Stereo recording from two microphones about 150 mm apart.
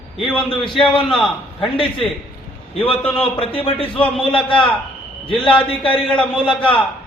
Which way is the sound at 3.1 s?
40° left (ahead or behind).